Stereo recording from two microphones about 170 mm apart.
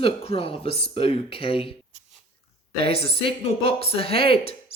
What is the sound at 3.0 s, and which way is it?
Speech, 35° left (ahead or behind).